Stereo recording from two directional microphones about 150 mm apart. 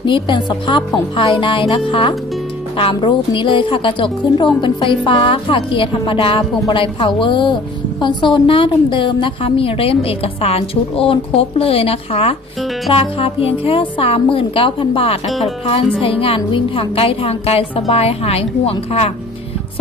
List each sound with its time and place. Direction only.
0.0 s a woman's voice: 30° left (ahead or behind)